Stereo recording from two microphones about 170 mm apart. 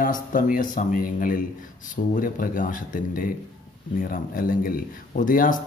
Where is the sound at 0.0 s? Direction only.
50° left (ahead or behind).